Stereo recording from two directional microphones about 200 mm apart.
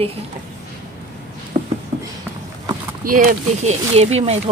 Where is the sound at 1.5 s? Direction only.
30° right (ahead or behind).